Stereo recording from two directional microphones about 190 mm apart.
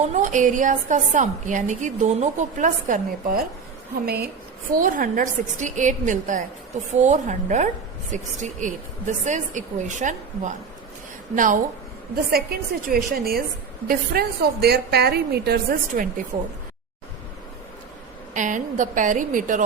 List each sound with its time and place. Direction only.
0.1 s a woman's voice: 40° right (ahead or behind)
4.0 s a woman's voice: 55° right (ahead or behind)
4.8 s a woman's voice: 45° right (ahead or behind)
18.3 s a woman's voice: 40° right (ahead or behind)